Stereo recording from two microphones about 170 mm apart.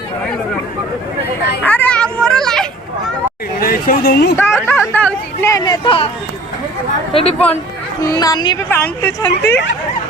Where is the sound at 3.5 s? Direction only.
60° left (ahead or behind).